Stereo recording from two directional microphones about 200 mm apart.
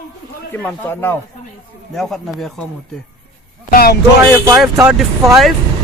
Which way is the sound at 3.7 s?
50° left (ahead or behind).